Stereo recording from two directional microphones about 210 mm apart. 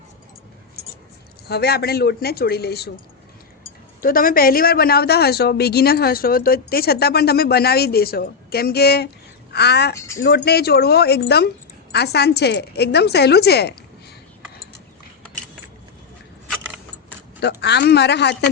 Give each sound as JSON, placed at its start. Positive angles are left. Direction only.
{"t": 1.5, "sound": "speech", "side_deg": 50}
{"t": 4.0, "sound": "speech", "side_deg": 40}
{"t": 17.6, "sound": "speech", "side_deg": 55}